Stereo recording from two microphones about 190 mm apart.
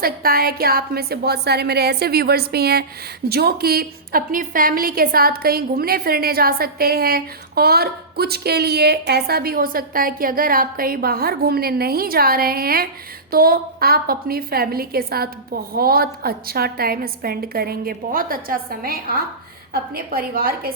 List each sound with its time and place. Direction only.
0.0 s a woman's voice: 50° right (ahead or behind)